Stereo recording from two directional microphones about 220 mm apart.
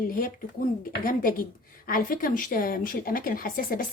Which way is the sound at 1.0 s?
40° left (ahead or behind).